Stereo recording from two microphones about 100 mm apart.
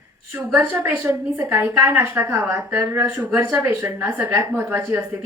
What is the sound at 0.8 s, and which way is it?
A woman's voice, 20° right (ahead or behind).